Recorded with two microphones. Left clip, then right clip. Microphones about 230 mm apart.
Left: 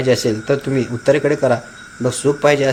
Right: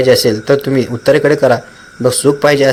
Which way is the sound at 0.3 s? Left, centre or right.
Right.